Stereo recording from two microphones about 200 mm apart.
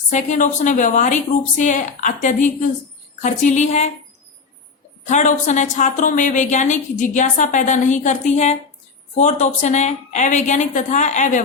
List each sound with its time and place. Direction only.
0.1 s a woman's voice: 35° left (ahead or behind)
5.0 s a woman's voice: 35° left (ahead or behind)